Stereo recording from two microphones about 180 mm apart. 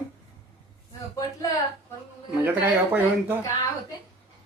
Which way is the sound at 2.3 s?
10° right (ahead or behind).